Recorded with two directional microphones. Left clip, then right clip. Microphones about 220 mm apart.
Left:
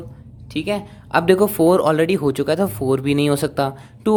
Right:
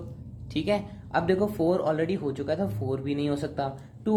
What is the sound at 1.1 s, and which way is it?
Speech, 40° left (ahead or behind).